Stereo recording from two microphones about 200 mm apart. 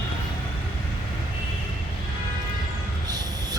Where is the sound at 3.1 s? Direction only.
20° right (ahead or behind).